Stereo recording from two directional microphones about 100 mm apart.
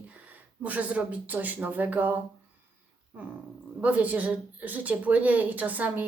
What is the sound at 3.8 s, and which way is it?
A woman's voice, 15° right (ahead or behind).